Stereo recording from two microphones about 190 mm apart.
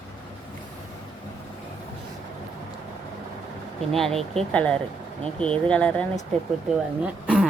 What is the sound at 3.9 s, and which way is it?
Speech, centre (ahead or behind).